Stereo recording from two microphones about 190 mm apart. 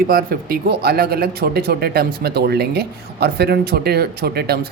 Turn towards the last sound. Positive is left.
turn(degrees=-55)  # may be behind; listen again after turning